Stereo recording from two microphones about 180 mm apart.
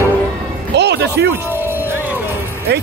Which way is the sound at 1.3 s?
10° right (ahead or behind).